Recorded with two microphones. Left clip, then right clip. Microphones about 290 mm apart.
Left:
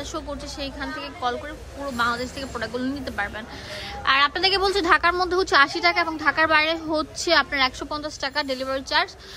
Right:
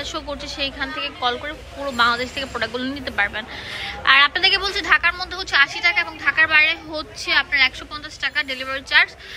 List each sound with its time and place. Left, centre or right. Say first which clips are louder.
0.1 s a woman's voice: right 3 dB; centre